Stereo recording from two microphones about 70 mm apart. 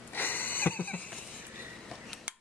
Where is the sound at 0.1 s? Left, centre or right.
Left.